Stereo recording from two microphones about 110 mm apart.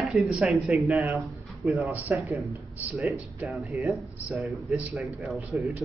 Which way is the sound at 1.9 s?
15° right (ahead or behind).